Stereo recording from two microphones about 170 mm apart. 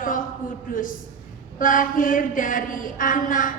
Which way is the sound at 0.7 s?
55° left (ahead or behind).